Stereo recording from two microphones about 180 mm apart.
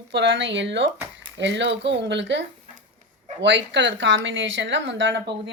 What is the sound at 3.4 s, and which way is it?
Speech, 85° right.